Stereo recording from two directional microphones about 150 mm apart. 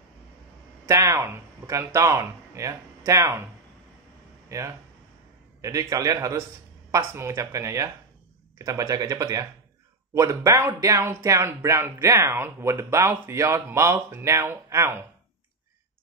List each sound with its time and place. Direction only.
0.8 s speech: 20° right (ahead or behind)
4.5 s speech: 20° right (ahead or behind)